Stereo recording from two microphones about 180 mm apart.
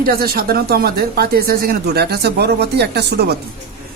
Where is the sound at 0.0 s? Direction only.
55° right (ahead or behind).